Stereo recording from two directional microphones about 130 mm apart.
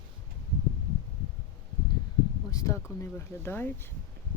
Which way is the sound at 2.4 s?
25° left (ahead or behind).